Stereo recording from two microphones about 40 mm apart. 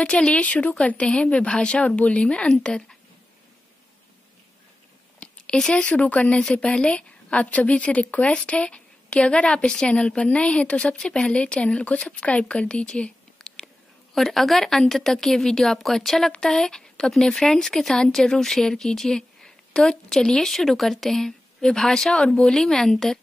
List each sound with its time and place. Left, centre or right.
0.0 s speech: left
5.2 s a sound: left
5.7 s a woman's voice: left
13.4 s whispering: centre
14.1 s a woman's voice: centre
16.3 s speech: centre